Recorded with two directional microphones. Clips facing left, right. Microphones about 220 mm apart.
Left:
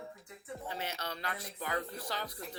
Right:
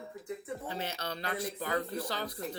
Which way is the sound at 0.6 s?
30° right (ahead or behind).